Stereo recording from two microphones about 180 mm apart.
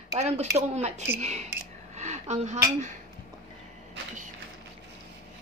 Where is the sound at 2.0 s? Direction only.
40° right (ahead or behind).